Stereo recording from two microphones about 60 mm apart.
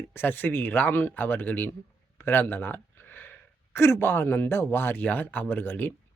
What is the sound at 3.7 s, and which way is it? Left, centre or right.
Speech, left.